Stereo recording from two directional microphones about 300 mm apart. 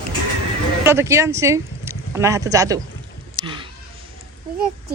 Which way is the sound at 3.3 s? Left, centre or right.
Centre.